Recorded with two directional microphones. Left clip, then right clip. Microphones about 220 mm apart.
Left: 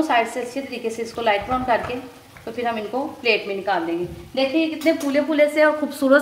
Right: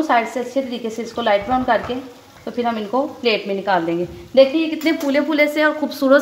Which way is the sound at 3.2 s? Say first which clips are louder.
Even; 40° right (ahead or behind).